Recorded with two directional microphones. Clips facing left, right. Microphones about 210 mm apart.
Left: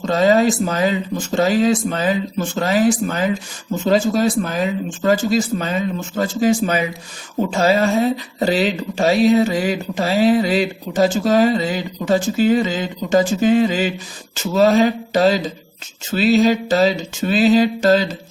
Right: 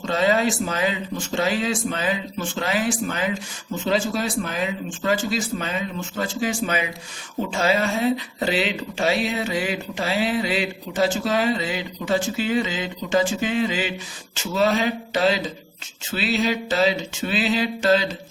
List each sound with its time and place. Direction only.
0.1 s speech: 40° left (ahead or behind)